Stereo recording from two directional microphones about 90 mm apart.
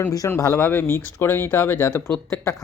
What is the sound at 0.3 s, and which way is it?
Speech, 35° left (ahead or behind).